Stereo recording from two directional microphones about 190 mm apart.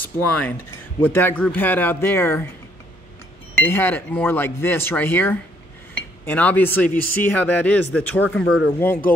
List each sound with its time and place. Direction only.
0.3 s speech: 10° left (ahead or behind)
3.5 s speech: 10° left (ahead or behind)